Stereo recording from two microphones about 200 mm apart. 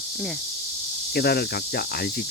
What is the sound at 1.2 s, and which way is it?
Speech, 50° left (ahead or behind).